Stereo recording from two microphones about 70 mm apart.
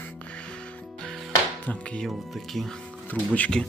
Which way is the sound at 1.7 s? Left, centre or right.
Centre.